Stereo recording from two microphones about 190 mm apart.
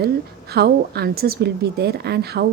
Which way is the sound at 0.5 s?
55° right (ahead or behind).